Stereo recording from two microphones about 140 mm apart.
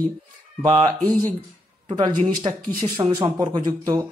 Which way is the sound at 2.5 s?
40° right (ahead or behind).